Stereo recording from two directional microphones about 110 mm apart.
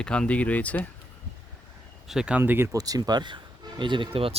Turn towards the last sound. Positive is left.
turn(degrees=-50)  # may be behind; listen again after turning